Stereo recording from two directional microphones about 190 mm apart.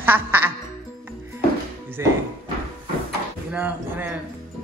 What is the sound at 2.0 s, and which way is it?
Music, 15° right (ahead or behind).